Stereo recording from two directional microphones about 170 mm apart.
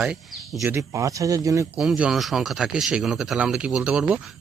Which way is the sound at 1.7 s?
5° right (ahead or behind).